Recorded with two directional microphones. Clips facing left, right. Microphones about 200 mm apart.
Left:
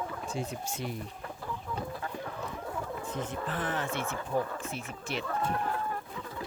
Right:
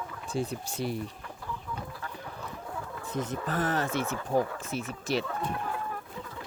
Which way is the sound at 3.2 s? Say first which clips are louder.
Right 6 dB; 40° right (ahead or behind).